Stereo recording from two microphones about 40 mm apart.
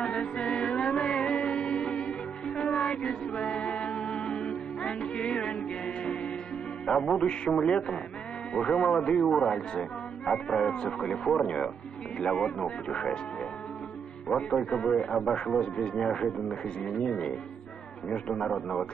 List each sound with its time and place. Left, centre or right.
0.0 s music: left
7.2 s a man's voice: left
14.3 s a man's voice: centre
18.3 s a man's voice: centre